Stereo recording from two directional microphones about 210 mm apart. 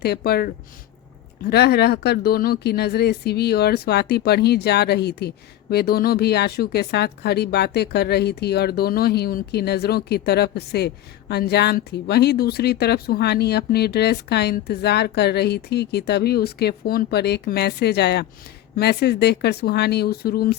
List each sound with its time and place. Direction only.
0.0 s a woman's voice: 50° left (ahead or behind)